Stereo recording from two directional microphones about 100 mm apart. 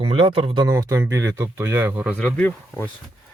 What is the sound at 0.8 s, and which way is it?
Speech, 30° right (ahead or behind).